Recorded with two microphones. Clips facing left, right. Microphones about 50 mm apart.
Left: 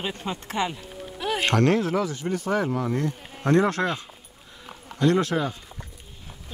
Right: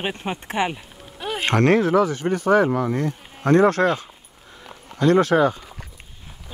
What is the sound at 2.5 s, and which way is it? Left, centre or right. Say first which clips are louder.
Speech: right 9 dB; right.